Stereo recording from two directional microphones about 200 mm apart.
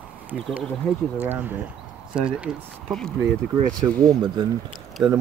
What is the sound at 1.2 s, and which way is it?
Speech, 10° right (ahead or behind).